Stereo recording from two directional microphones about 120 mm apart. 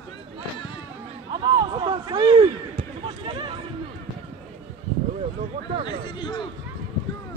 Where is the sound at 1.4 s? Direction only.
40° right (ahead or behind).